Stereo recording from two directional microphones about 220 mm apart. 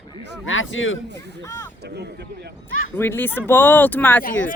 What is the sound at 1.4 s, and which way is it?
Speech, 10° left (ahead or behind).